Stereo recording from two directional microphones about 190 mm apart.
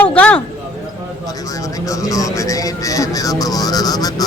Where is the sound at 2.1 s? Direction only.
15° left (ahead or behind).